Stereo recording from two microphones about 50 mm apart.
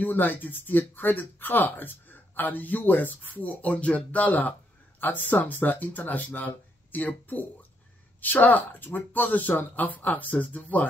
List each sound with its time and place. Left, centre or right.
0.0 s speech: left